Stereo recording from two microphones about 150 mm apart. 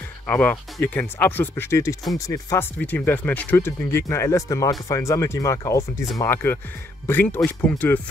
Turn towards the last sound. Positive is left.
turn(degrees=10)  # may be behind; listen again after turning